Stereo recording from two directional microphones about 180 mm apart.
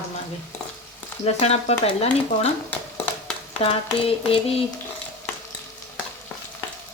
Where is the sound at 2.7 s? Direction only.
10° left (ahead or behind).